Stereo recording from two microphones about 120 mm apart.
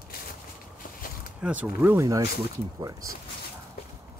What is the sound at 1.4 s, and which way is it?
Speech, 15° right (ahead or behind).